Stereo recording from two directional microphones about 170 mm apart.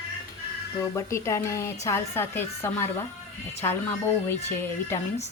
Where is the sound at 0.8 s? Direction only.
15° left (ahead or behind).